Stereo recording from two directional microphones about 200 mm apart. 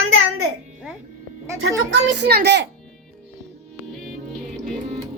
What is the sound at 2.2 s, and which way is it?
Speech, 55° right (ahead or behind).